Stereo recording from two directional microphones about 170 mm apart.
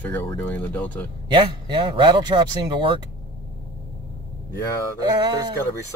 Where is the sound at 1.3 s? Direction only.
30° right (ahead or behind).